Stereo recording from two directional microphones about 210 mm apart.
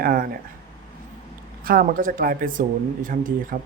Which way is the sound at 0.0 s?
45° right (ahead or behind).